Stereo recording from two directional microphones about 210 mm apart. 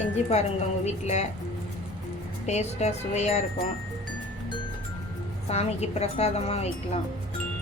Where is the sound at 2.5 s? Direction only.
30° left (ahead or behind).